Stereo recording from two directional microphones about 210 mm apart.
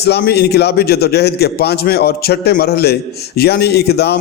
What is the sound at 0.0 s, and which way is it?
A man's voice, 50° left (ahead or behind).